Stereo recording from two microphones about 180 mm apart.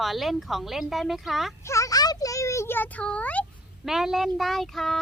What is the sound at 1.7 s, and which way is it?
A child's voice, 20° left (ahead or behind).